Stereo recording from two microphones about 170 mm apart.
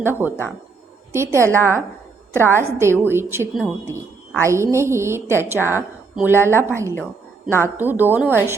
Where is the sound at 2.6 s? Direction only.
15° right (ahead or behind).